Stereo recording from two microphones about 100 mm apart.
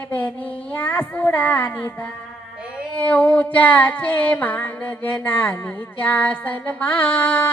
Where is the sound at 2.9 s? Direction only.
15° left (ahead or behind).